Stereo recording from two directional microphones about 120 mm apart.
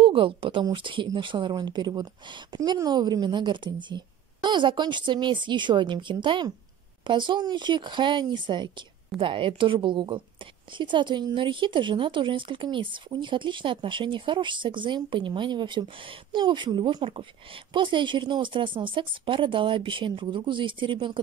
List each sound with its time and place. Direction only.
0.0 s a woman's voice: 45° right (ahead or behind)